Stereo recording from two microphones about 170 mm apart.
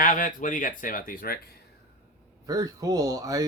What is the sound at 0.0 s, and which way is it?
Speech, 50° left (ahead or behind).